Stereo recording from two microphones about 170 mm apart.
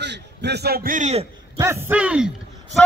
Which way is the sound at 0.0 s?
85° right.